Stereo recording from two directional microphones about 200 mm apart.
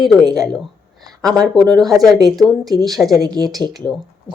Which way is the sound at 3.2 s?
20° right (ahead or behind).